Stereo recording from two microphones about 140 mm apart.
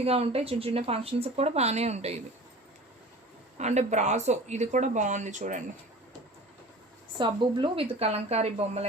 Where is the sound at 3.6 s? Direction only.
55° right (ahead or behind).